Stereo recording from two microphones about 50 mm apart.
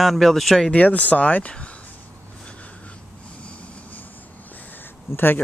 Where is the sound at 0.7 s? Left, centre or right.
Left.